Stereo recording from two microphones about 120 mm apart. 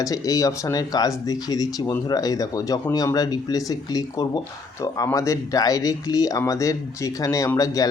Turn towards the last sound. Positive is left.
turn(degrees=30)  # may be behind; listen again after turning